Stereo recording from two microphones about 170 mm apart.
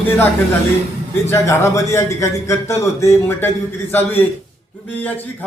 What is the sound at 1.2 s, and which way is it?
A man's voice, 15° left (ahead or behind).